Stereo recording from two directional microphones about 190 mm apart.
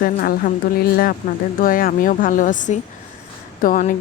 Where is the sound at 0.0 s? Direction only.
50° left (ahead or behind).